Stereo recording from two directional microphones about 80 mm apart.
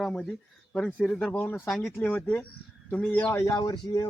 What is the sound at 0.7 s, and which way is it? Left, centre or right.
Speech, centre.